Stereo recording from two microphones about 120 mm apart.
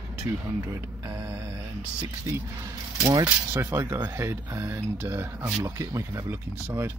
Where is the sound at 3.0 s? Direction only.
25° right (ahead or behind).